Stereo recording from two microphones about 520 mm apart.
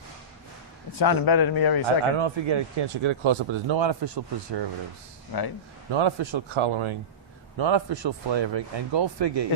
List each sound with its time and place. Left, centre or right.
0.9 s a man's voice: left
2.1 s speech: right
5.3 s a man's voice: left
5.9 s speech: right
7.6 s speech: right